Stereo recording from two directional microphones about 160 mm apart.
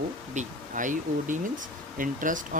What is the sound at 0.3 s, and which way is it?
Speech, 55° right (ahead or behind).